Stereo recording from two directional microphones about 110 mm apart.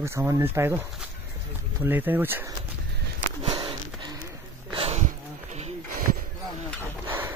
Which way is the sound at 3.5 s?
35° right (ahead or behind).